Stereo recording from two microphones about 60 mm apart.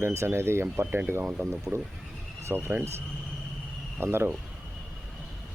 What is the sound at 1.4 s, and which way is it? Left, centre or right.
Speech, right.